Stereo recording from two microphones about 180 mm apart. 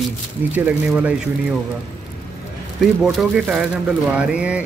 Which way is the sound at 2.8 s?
Centre (ahead or behind).